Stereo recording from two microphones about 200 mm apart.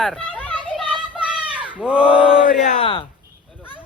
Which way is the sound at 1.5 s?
5° right (ahead or behind).